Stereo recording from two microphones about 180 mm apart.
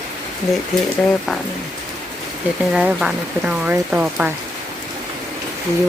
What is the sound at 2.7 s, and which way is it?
Speech, 5° right (ahead or behind).